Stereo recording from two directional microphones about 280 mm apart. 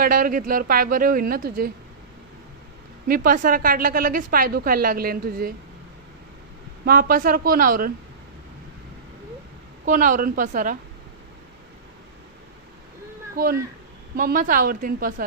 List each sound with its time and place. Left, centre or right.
0.0 s a woman's voice: right
3.1 s a woman's voice: right
6.8 s a woman's voice: right
9.8 s a woman's voice: right
13.3 s a woman's voice: right